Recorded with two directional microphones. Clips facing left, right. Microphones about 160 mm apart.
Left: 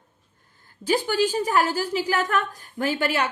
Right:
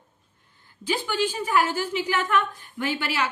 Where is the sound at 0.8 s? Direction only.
40° left (ahead or behind).